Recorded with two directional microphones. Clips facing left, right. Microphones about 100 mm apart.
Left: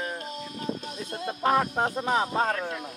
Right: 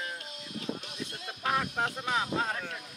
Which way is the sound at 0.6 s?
40° left (ahead or behind).